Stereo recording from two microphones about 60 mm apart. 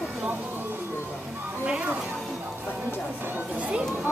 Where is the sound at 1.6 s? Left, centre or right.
Right.